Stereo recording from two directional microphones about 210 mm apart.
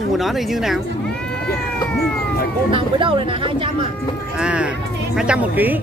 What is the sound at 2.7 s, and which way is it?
Speech, 25° right (ahead or behind).